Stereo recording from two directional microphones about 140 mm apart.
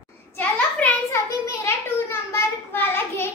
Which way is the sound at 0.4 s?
10° left (ahead or behind).